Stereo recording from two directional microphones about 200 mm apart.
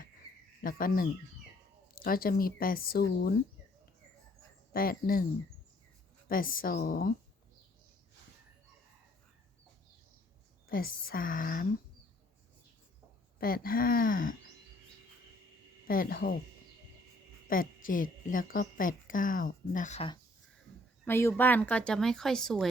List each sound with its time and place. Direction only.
0.2 s cricket: 30° right (ahead or behind)
0.6 s a woman's voice: 45° left (ahead or behind)
4.7 s a woman's voice: 45° left (ahead or behind)
6.2 s a woman's voice: 45° left (ahead or behind)
10.7 s a woman's voice: 45° left (ahead or behind)
13.4 s a woman's voice: 45° left (ahead or behind)
15.9 s a woman's voice: 45° left (ahead or behind)
17.5 s a woman's voice: 45° left (ahead or behind)
21.0 s speech: 10° left (ahead or behind)